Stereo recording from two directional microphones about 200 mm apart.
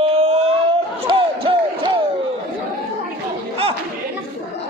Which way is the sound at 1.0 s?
25° right (ahead or behind).